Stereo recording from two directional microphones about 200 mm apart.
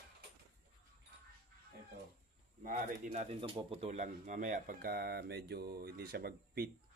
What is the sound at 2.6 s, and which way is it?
Speech, 40° right (ahead or behind).